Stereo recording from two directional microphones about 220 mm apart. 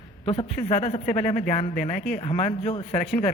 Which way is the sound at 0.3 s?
30° left (ahead or behind).